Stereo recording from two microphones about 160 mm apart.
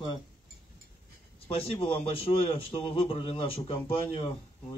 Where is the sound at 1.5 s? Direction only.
40° left (ahead or behind).